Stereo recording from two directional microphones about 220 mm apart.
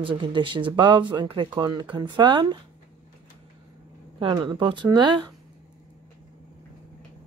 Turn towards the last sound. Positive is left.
turn(degrees=-20)  # may be behind; listen again after turning